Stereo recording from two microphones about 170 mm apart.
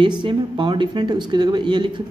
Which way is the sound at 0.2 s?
30° right (ahead or behind).